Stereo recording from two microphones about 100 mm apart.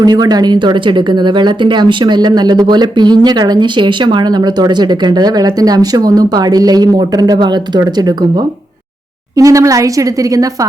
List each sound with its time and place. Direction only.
0.0 s speech: 40° right (ahead or behind)
9.3 s speech: 35° right (ahead or behind)